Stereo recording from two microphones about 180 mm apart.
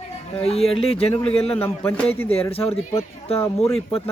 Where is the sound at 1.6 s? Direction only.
10° left (ahead or behind).